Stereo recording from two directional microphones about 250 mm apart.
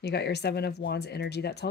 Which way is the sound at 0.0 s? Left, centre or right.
Left.